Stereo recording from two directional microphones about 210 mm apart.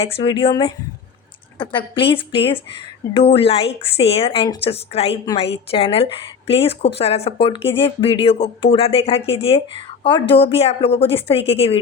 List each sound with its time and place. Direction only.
0.0 s speech: 25° left (ahead or behind)